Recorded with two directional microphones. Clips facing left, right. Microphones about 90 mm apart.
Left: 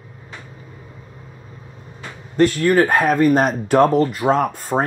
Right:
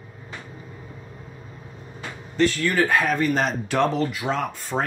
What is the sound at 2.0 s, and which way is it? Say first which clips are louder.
Speech: left 5 dB; 45° left (ahead or behind).